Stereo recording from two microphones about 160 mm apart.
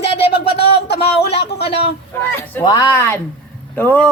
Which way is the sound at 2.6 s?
25° left (ahead or behind).